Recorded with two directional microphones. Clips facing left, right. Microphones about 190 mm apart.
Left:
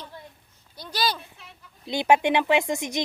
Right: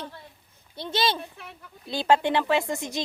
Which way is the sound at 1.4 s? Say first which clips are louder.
Right 6 dB; 55° right (ahead or behind).